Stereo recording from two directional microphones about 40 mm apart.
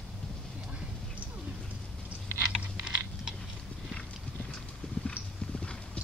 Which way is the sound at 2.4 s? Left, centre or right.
Right.